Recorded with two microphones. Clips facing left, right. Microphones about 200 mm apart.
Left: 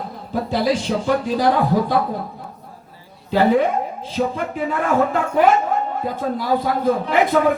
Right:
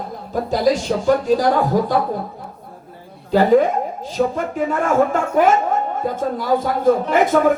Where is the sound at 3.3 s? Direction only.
40° right (ahead or behind).